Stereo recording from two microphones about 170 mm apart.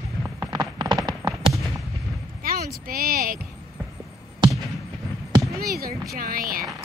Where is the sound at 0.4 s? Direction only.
25° right (ahead or behind).